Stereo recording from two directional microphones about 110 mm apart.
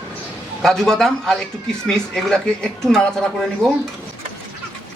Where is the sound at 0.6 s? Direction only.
5° left (ahead or behind).